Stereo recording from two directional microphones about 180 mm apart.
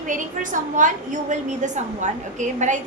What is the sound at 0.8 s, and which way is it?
A woman's voice, 45° right (ahead or behind).